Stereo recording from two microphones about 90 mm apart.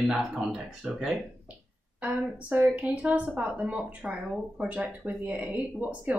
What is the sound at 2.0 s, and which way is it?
A woman's voice, 15° right (ahead or behind).